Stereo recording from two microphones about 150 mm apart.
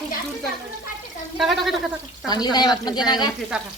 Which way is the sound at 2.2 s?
25° left (ahead or behind).